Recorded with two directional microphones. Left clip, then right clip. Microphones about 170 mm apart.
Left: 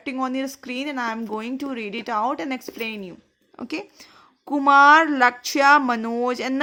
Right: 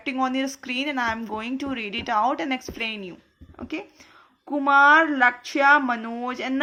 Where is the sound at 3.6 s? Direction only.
60° left (ahead or behind).